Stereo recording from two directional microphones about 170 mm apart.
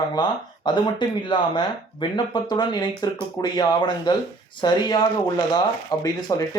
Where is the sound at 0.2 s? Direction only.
25° left (ahead or behind).